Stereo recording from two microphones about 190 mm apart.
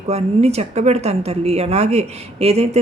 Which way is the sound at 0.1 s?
35° right (ahead or behind).